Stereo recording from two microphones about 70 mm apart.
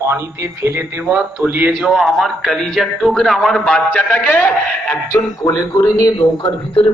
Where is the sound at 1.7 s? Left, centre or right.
Centre.